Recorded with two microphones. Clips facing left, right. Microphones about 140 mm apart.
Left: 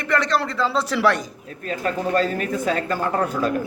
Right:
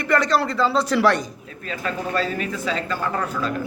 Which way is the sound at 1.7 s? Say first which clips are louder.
Left 4 dB; 45° left (ahead or behind).